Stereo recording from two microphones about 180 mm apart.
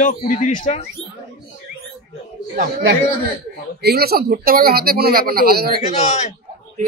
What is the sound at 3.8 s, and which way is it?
Speech, 60° right (ahead or behind).